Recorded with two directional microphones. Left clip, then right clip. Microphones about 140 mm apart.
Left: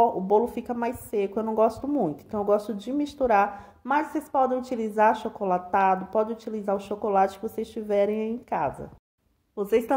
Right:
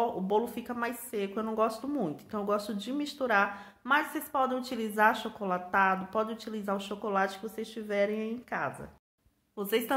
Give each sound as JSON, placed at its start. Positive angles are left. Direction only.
{"t": 0.0, "sound": "speech", "side_deg": 40}
{"t": 4.0, "sound": "a woman's voice", "side_deg": 10}
{"t": 4.3, "sound": "speech", "side_deg": 35}
{"t": 7.1, "sound": "speech", "side_deg": 55}